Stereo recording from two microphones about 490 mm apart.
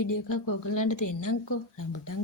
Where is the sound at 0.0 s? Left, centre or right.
Left.